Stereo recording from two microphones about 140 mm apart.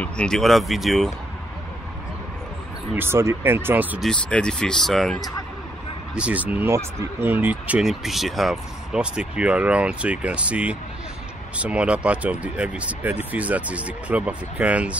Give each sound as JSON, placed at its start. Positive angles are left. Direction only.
{"t": 0.0, "sound": "speech", "side_deg": 5}
{"t": 3.0, "sound": "speech", "side_deg": -20}
{"t": 4.0, "sound": "speech", "side_deg": 5}
{"t": 6.1, "sound": "speech", "side_deg": -10}